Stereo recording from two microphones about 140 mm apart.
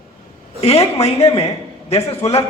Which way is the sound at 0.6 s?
45° left (ahead or behind).